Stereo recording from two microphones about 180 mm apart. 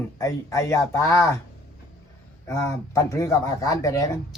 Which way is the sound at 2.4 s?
15° left (ahead or behind).